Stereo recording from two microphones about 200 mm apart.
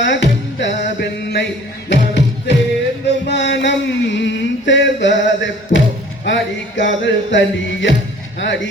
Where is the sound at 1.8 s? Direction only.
60° left (ahead or behind).